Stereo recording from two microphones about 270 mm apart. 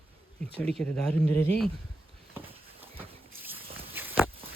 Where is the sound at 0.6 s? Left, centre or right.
Centre.